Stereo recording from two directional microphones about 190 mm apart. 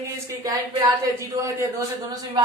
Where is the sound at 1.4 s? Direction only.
20° right (ahead or behind).